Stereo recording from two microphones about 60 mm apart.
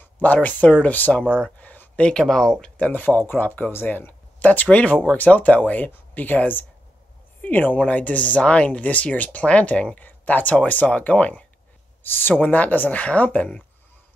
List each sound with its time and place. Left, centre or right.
0.0 s speech: left
1.4 s a sound: left
2.0 s speech: centre
2.8 s speech: left
12.0 s speech: left; by 13.7 s centre